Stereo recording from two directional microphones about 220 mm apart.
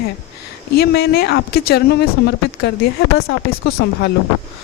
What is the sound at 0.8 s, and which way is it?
Speech, 45° left (ahead or behind).